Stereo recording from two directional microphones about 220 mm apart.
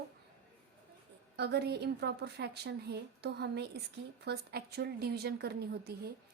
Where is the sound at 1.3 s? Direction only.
50° right (ahead or behind).